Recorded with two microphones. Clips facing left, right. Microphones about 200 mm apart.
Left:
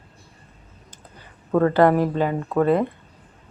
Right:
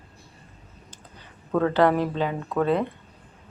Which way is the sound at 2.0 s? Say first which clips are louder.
Left 4 dB; 50° left (ahead or behind).